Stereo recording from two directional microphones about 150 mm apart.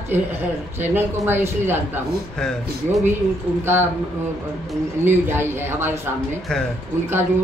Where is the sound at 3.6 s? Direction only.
15° right (ahead or behind).